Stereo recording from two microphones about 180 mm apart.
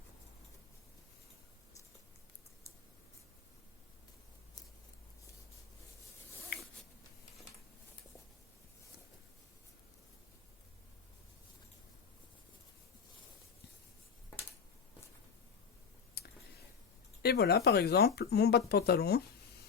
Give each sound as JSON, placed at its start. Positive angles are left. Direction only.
{"t": 16.2, "sound": "clicking", "side_deg": 60}
{"t": 17.2, "sound": "speech", "side_deg": 60}